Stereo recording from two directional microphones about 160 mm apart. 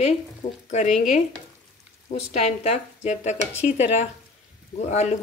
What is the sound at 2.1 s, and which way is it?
Speech, 40° left (ahead or behind).